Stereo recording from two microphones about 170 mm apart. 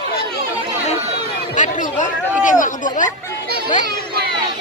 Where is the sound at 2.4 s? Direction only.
50° left (ahead or behind).